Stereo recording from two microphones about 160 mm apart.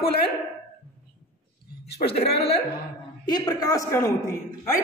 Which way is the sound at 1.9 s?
90° left.